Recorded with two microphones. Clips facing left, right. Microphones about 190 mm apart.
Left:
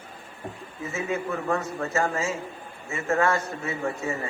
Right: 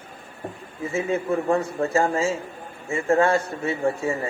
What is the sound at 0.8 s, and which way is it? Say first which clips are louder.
Speech: right 5 dB; 30° right (ahead or behind).